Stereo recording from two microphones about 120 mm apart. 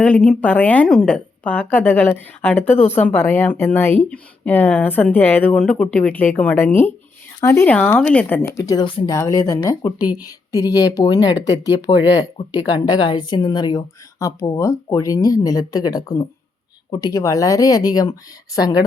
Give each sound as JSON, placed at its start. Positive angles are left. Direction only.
{"t": 0.0, "sound": "a woman's voice", "side_deg": 10}
{"t": 8.8, "sound": "speech", "side_deg": 45}
{"t": 9.0, "sound": "speech", "side_deg": 25}
{"t": 14.2, "sound": "speech", "side_deg": 25}